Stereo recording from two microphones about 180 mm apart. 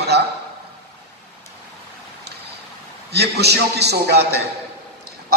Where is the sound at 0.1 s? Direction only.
70° right (ahead or behind).